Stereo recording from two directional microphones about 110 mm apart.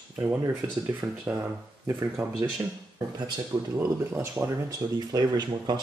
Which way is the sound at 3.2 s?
40° right (ahead or behind).